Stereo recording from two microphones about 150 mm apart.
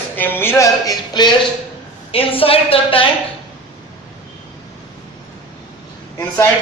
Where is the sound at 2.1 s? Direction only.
40° left (ahead or behind).